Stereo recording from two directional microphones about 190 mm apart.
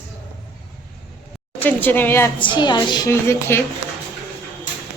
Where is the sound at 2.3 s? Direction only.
25° left (ahead or behind).